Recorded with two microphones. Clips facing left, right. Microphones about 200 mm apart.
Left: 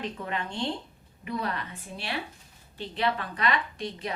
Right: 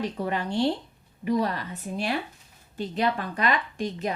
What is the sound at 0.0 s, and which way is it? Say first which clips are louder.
A woman's voice: right 5 dB; 35° right (ahead or behind).